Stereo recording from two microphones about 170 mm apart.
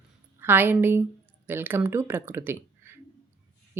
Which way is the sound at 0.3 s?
10° right (ahead or behind).